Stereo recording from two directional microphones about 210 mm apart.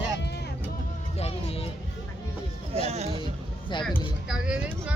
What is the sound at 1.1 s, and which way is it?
Music, 30° left (ahead or behind).